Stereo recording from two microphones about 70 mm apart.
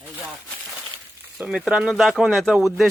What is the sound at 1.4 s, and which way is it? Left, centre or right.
Speech, right.